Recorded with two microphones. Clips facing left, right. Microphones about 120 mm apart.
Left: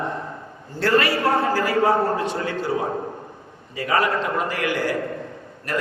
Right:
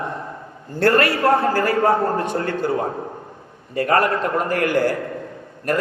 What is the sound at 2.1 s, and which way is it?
Speech, 50° right (ahead or behind).